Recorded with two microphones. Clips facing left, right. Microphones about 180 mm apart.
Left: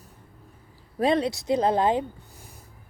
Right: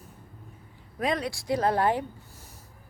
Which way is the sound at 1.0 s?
25° left (ahead or behind).